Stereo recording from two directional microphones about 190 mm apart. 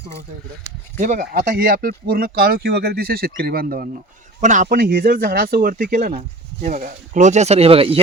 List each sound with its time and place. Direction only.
0.9 s speech: 45° right (ahead or behind); by 8.0 s 30° right (ahead or behind)